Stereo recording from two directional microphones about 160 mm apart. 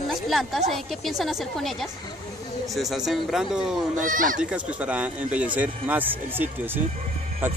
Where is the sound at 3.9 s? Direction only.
55° right (ahead or behind).